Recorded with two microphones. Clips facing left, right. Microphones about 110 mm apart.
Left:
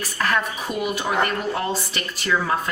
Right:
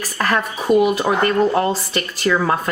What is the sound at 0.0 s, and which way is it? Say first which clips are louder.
A woman's voice: right 3 dB; 40° right (ahead or behind).